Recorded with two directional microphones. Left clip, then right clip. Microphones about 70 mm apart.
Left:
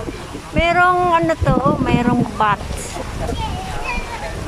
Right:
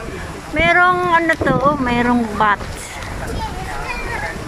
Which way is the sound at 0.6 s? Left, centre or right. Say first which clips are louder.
Right 1 dB; centre.